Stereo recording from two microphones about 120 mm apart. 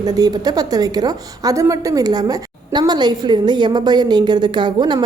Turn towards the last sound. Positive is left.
turn(degrees=-40)  # may be behind; listen again after turning